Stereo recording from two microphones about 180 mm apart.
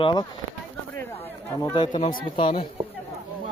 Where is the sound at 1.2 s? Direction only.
15° left (ahead or behind).